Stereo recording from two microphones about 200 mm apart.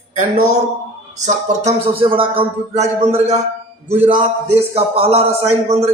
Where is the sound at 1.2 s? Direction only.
35° right (ahead or behind).